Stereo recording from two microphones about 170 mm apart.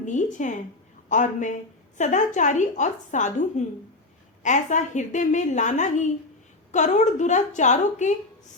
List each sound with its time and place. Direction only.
0.0 s a woman's voice: 45° left (ahead or behind)